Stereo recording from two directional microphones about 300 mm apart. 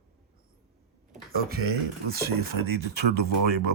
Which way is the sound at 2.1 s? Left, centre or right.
Right.